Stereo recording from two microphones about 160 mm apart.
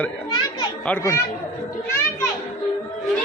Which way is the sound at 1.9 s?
15° left (ahead or behind).